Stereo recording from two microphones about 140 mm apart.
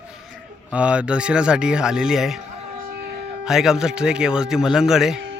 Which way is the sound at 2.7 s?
90° right.